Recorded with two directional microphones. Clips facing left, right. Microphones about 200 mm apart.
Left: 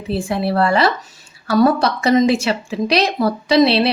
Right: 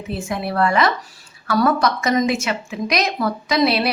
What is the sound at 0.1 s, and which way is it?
A woman's voice, 30° left (ahead or behind).